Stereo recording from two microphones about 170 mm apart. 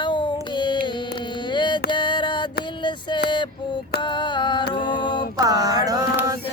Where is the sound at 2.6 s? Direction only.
25° left (ahead or behind).